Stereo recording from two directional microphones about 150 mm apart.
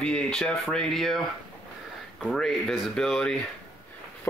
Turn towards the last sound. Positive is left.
turn(degrees=5)  # may be behind; listen again after turning